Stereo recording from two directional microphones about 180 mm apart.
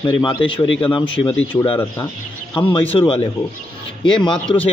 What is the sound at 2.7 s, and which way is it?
A man's voice, 30° left (ahead or behind).